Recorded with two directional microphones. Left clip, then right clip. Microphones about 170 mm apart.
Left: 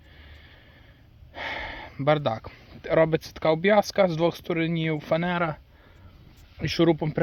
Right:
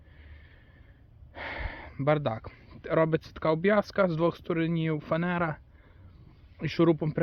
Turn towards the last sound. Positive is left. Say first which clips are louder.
# left 3 dB
turn(degrees=20)  # may be behind; listen again after turning